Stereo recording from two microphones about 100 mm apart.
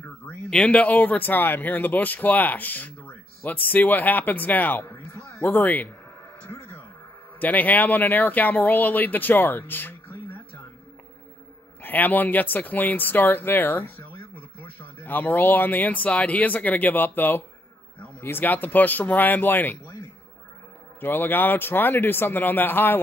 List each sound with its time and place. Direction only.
0.5 s speech: 10° left (ahead or behind)
7.3 s speech: 15° left (ahead or behind)
11.8 s speech: 15° left (ahead or behind)
21.0 s speech: 20° left (ahead or behind)